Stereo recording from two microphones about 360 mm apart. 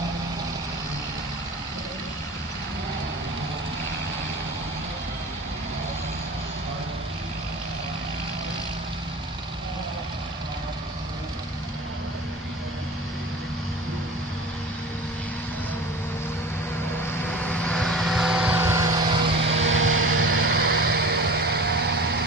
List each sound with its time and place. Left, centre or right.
17.5 s vehicle: centre
19.3 s vehicle: right